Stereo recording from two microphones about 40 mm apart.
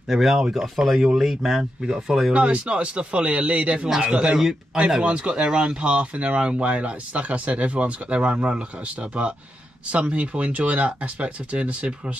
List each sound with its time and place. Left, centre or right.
0.1 s speech: centre
2.3 s speech: right
4.2 s speech: centre
5.0 s speech: right